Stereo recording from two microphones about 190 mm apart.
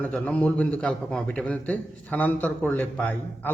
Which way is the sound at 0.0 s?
5° left (ahead or behind).